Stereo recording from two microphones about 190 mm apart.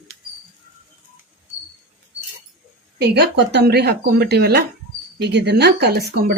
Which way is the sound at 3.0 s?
60° right (ahead or behind).